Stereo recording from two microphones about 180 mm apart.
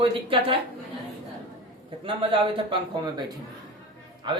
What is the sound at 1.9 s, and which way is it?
Speech, 30° right (ahead or behind).